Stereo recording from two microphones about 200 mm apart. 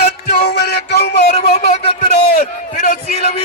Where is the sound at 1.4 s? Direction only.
50° left (ahead or behind).